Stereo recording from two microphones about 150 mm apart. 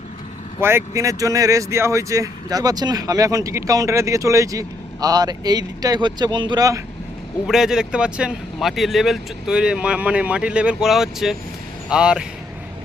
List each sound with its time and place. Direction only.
0.6 s speech: 15° right (ahead or behind)
7.4 s speech: 5° right (ahead or behind)